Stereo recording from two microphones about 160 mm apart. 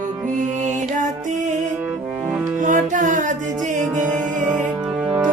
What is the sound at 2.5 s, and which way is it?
Music, 50° right (ahead or behind).